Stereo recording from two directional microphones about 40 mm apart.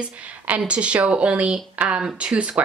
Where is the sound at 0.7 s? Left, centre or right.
Right.